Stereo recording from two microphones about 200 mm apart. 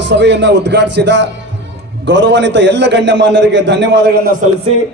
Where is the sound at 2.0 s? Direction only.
65° right (ahead or behind).